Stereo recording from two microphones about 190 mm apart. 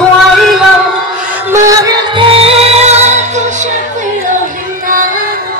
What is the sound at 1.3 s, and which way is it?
Music, 15° right (ahead or behind).